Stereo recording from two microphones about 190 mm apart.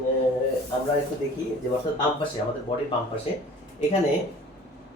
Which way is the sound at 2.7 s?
30° left (ahead or behind).